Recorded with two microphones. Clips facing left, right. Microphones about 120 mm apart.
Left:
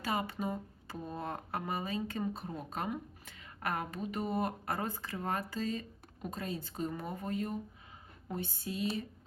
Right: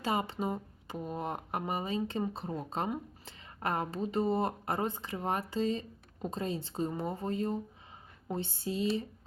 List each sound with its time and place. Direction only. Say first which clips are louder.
0.0 s speech: right 3 dB; 25° right (ahead or behind)